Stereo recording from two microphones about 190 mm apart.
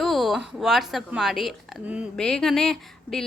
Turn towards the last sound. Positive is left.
turn(degrees=0)  # may be behind; listen again after turning